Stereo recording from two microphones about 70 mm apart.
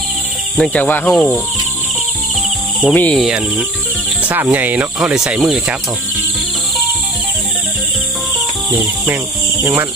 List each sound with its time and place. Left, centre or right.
0.5 s speech: centre
1.0 s cricket: centre
2.9 s speech: left
3.3 s speech: centre
4.4 s speech: right
5.0 s speech: centre
9.6 s cricket: right